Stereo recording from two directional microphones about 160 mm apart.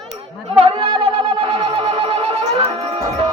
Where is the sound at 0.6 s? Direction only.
30° right (ahead or behind).